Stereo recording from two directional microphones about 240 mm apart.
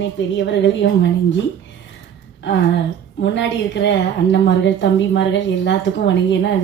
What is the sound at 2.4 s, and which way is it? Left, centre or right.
A woman's voice, left.